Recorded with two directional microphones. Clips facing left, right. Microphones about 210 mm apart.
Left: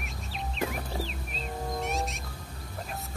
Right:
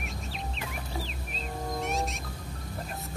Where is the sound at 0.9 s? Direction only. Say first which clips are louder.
Left 2 dB; centre (ahead or behind).